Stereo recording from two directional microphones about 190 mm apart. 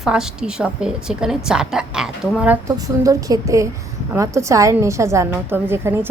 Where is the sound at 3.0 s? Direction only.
15° right (ahead or behind).